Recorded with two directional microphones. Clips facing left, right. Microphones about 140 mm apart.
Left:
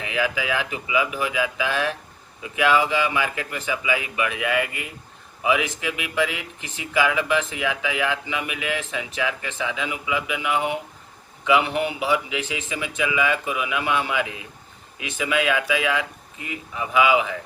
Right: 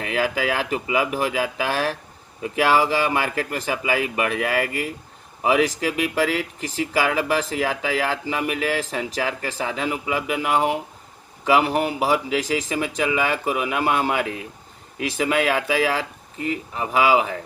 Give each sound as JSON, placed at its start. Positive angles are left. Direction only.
{"t": 0.0, "sound": "speech", "side_deg": -45}